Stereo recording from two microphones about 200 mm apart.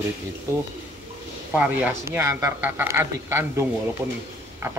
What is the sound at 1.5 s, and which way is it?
A man's voice, 10° right (ahead or behind).